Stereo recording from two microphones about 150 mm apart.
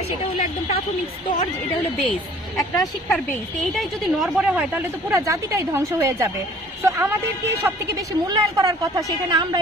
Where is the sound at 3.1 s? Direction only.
Centre (ahead or behind).